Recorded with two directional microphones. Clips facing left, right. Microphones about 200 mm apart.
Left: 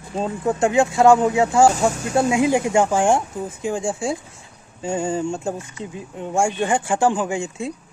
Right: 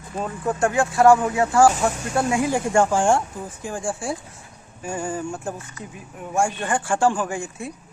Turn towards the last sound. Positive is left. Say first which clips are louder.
# left 3 dB
turn(degrees=25)  # may be behind; listen again after turning